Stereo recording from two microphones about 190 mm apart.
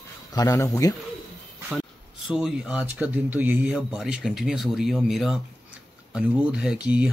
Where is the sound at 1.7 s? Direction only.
Centre (ahead or behind).